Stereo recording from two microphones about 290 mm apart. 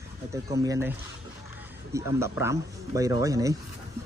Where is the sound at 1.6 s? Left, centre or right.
Centre.